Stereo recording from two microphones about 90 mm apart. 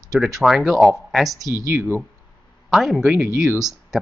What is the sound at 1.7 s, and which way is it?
Speech, 25° right (ahead or behind).